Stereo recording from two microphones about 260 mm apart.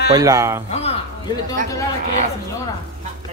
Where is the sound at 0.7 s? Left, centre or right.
Left.